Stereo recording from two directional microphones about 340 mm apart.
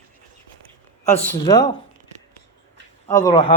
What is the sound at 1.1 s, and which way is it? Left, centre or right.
Speech, centre.